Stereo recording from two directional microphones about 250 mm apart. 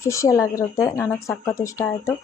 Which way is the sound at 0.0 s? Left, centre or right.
Centre.